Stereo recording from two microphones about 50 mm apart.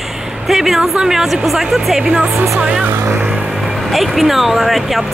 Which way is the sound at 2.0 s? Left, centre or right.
Right.